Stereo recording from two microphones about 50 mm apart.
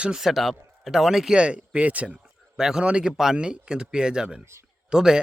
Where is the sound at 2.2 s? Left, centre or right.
Centre.